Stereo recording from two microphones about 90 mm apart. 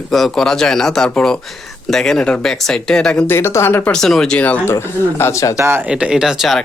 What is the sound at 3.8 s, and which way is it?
Speech, 5° left (ahead or behind).